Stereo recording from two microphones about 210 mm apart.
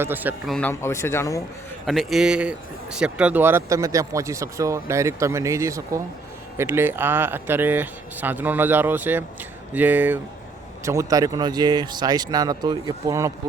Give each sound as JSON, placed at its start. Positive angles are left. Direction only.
{"t": 0.0, "sound": "speech", "side_deg": -10}
{"t": 0.5, "sound": "speech", "side_deg": 10}
{"t": 1.9, "sound": "speech", "side_deg": 0}